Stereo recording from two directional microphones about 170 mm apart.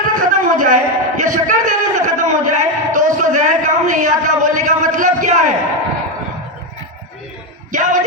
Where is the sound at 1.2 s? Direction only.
50° right (ahead or behind).